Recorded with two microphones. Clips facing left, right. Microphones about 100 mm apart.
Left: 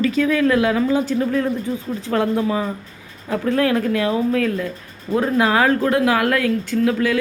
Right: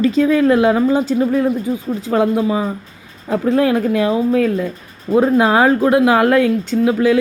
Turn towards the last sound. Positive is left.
turn(degrees=-20)  # may be behind; listen again after turning